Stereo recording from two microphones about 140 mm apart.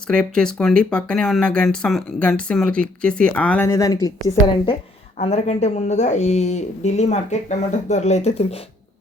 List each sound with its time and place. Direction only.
0.1 s speech: 5° left (ahead or behind)
3.7 s a woman's voice: 20° left (ahead or behind)
5.1 s speech: 50° left (ahead or behind)